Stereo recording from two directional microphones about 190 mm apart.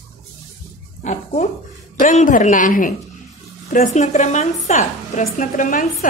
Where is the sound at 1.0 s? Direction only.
35° left (ahead or behind).